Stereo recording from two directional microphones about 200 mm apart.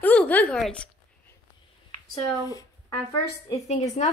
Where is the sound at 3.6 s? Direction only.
35° left (ahead or behind).